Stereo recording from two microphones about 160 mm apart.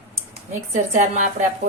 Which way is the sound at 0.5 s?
45° right (ahead or behind).